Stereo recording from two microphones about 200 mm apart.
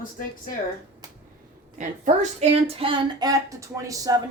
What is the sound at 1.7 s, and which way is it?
A woman's voice, 35° right (ahead or behind).